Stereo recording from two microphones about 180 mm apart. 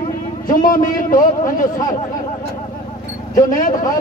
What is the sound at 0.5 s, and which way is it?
A man's voice, 50° left (ahead or behind).